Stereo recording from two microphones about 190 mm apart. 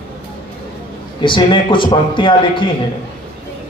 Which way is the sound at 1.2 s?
25° left (ahead or behind).